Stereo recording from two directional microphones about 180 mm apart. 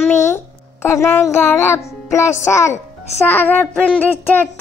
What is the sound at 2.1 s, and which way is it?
Child singing, 15° left (ahead or behind).